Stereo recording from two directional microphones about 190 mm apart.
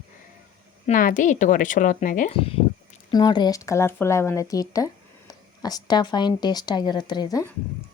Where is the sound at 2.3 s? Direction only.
30° left (ahead or behind).